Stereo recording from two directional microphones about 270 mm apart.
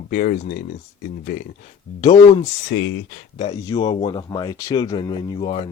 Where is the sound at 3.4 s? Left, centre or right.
Centre.